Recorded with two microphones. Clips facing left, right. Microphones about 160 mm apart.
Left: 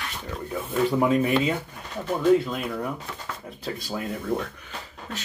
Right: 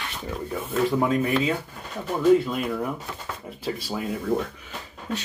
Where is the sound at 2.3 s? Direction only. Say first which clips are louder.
Right 1 dB; centre (ahead or behind).